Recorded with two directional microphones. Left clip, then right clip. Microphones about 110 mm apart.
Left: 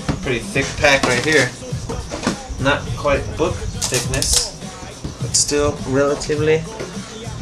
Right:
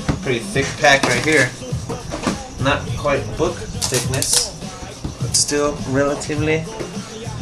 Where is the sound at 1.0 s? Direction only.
15° left (ahead or behind).